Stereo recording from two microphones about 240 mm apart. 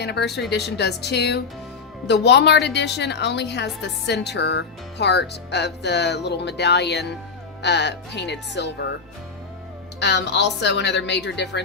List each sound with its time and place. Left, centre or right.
0.0 s speech: left
10.0 s speech: left